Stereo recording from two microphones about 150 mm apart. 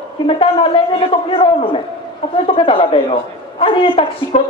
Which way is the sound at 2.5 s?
35° left (ahead or behind).